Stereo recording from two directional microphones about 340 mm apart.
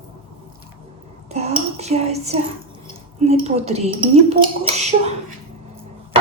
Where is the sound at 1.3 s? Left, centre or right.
Centre.